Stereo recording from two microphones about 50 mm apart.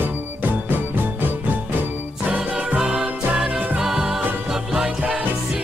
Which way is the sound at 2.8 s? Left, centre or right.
Centre.